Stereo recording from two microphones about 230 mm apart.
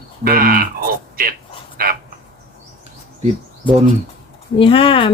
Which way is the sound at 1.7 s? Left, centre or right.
Right.